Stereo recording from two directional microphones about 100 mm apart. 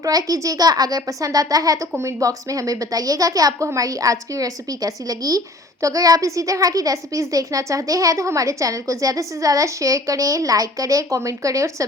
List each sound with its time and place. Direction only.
0.0 s a woman's voice: 35° right (ahead or behind)